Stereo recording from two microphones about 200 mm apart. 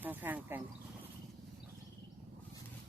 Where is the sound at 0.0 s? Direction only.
10° right (ahead or behind).